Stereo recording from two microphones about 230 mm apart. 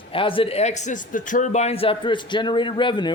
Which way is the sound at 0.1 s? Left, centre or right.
Left.